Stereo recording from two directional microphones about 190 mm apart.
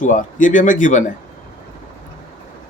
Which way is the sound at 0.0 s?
40° left (ahead or behind).